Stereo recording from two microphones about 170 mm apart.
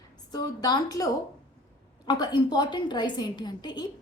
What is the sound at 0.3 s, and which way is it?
Speech, 25° left (ahead or behind).